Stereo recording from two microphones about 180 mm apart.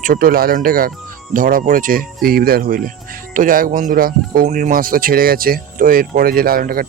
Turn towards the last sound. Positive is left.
turn(degrees=-55)  # may be behind; listen again after turning